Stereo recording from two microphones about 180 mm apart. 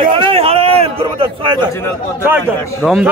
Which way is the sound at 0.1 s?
30° right (ahead or behind).